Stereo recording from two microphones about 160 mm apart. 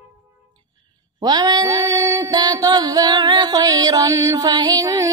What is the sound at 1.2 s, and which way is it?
Mantra, 25° right (ahead or behind).